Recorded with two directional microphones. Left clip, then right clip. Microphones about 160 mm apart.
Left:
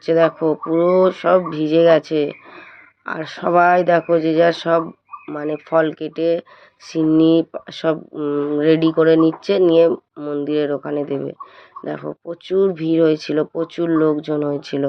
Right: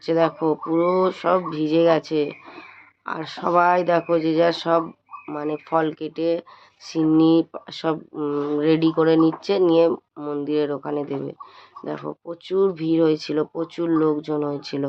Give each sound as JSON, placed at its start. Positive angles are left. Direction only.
{"t": 0.0, "sound": "speech", "side_deg": 20}